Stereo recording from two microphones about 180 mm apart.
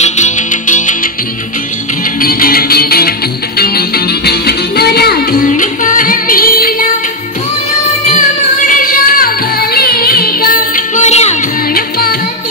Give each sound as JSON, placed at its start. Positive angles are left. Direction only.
{"t": 0.0, "sound": "music", "side_deg": 45}
{"t": 2.2, "sound": "music", "side_deg": 55}
{"t": 5.5, "sound": "music", "side_deg": 45}
{"t": 8.6, "sound": "music", "side_deg": 50}
{"t": 11.7, "sound": "music", "side_deg": 55}